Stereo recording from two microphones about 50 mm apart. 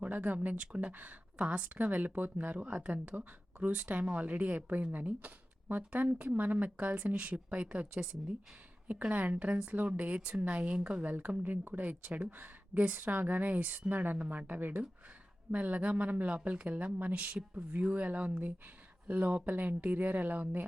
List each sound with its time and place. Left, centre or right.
0.0 s a woman's voice: right
11.0 s a woman's voice: right